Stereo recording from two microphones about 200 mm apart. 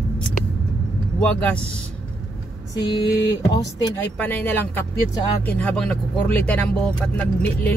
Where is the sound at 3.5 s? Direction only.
20° left (ahead or behind).